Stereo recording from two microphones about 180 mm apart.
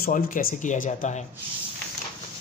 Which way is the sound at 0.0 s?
50° left (ahead or behind).